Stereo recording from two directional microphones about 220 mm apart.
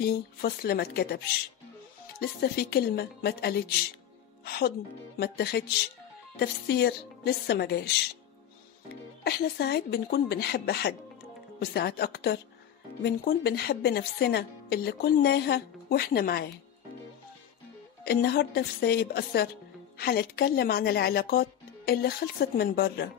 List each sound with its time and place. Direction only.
0.0 s a woman's voice: 45° left (ahead or behind)
9.2 s a woman's voice: 45° left (ahead or behind)
18.0 s a woman's voice: 45° left (ahead or behind)